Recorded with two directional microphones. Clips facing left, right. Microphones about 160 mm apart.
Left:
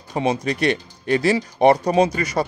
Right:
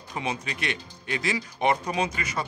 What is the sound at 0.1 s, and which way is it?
Speech, 35° left (ahead or behind).